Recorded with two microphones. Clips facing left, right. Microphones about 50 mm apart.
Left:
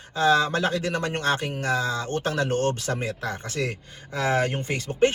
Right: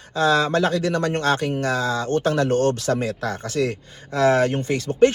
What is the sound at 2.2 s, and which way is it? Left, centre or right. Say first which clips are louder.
Speech: right 5 dB; right.